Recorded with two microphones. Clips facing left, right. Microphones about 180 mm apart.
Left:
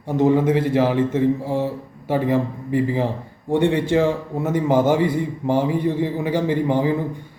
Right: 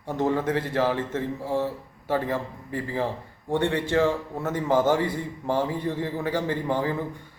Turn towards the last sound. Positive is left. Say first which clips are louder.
# left 7 dB
turn(degrees=15)  # may be behind; listen again after turning